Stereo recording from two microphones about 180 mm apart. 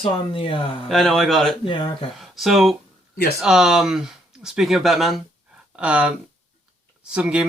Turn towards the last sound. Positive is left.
turn(degrees=-5)  # may be behind; listen again after turning